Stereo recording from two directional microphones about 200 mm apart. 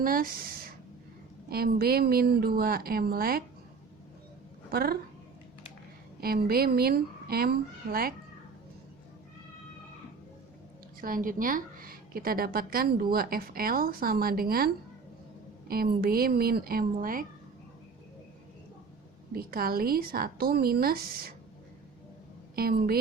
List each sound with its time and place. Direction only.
0.0 s a woman's voice: 45° right (ahead or behind)
4.7 s a woman's voice: 50° right (ahead or behind)
6.1 s a woman's voice: 50° right (ahead or behind)
11.0 s a woman's voice: 45° right (ahead or behind)
15.7 s a woman's voice: 50° right (ahead or behind)
19.3 s a woman's voice: 50° right (ahead or behind)
22.5 s a woman's voice: 50° right (ahead or behind)